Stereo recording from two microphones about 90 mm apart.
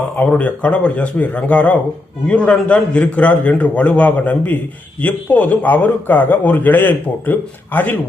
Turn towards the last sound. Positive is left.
turn(degrees=20)  # may be behind; listen again after turning